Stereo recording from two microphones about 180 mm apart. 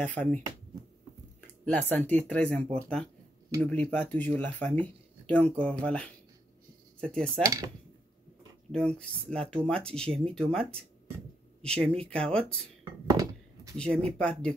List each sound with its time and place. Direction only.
0.0 s speech: 10° left (ahead or behind)
1.7 s speech: 10° left (ahead or behind)
7.4 s speech: 20° right (ahead or behind)
8.7 s speech: 5° left (ahead or behind)
13.1 s a sound: 20° right (ahead or behind)
13.7 s speech: 5° left (ahead or behind)